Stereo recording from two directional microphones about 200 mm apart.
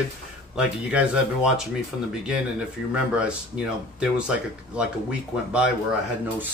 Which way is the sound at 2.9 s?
5° right (ahead or behind).